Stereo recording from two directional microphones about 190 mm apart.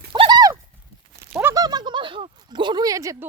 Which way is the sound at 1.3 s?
5° right (ahead or behind).